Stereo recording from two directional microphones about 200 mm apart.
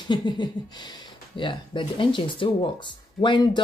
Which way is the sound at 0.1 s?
20° left (ahead or behind).